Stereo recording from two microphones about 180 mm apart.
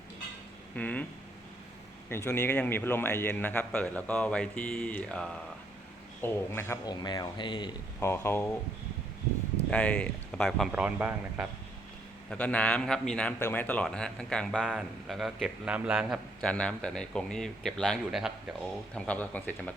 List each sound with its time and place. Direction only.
0.8 s speech: 10° left (ahead or behind)
2.0 s a man's voice: 15° left (ahead or behind)
7.9 s speech: 15° left (ahead or behind)
9.6 s speech: 5° left (ahead or behind)
10.7 s a man's voice: 5° right (ahead or behind)
12.3 s a man's voice: 5° left (ahead or behind)
18.9 s speech: 5° left (ahead or behind)